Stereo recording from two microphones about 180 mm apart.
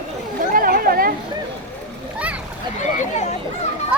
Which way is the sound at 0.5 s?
55° right (ahead or behind).